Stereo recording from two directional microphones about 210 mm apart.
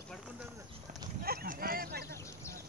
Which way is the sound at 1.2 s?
45° right (ahead or behind).